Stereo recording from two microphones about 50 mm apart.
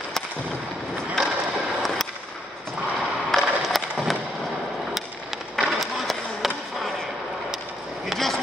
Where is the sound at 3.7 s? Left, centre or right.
Centre.